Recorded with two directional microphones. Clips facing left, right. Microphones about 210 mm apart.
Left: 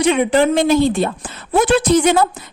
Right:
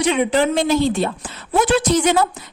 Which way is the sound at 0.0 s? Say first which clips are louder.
Left 3 dB; 55° left (ahead or behind).